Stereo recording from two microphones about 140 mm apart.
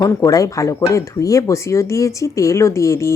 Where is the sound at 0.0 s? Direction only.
25° left (ahead or behind).